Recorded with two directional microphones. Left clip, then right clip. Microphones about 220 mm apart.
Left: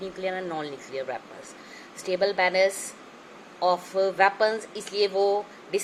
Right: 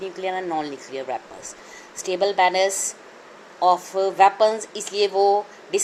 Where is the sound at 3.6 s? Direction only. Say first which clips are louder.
Right 5 dB; 35° right (ahead or behind).